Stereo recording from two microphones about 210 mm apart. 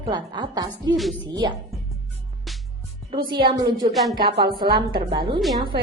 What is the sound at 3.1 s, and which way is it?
Speech, 25° right (ahead or behind).